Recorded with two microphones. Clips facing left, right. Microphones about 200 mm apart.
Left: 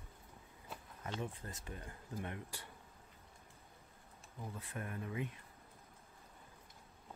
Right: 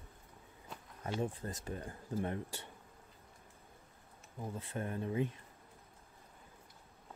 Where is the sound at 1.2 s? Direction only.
35° right (ahead or behind).